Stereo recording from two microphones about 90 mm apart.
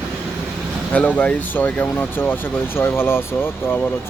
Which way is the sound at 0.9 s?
15° left (ahead or behind).